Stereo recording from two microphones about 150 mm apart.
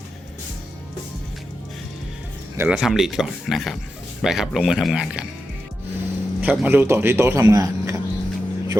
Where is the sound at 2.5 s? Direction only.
15° right (ahead or behind).